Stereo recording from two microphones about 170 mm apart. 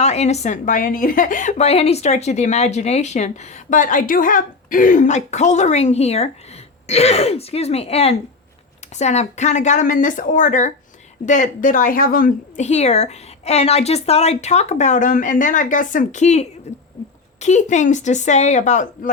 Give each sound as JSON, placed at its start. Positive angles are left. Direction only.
{"t": 0.0, "sound": "a woman's voice", "side_deg": 40}